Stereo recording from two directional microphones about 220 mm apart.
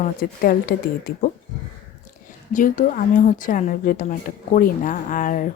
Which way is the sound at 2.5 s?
35° left (ahead or behind).